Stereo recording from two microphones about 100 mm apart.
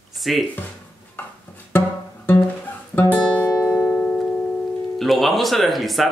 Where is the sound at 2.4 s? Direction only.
20° left (ahead or behind).